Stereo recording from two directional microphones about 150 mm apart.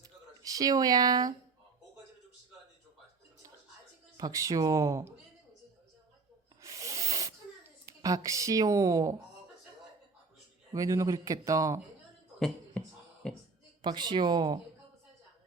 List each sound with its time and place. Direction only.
0.0 s speech: 25° right (ahead or behind)
4.2 s speech: 20° right (ahead or behind)
6.6 s a sound: 20° right (ahead or behind)
10.8 s speech: 20° right (ahead or behind)
13.2 s a woman's voice: 5° left (ahead or behind)
13.8 s speech: 30° right (ahead or behind)